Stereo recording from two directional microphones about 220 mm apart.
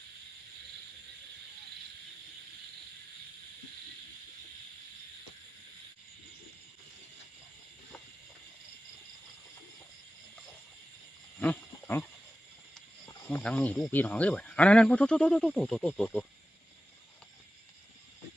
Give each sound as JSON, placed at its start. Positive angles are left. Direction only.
{"t": 11.3, "sound": "wild animals", "side_deg": 10}
{"t": 13.1, "sound": "speech", "side_deg": 10}